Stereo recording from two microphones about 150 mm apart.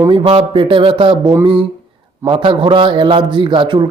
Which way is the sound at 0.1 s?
35° right (ahead or behind).